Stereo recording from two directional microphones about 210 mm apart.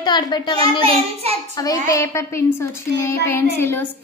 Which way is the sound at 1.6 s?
15° left (ahead or behind).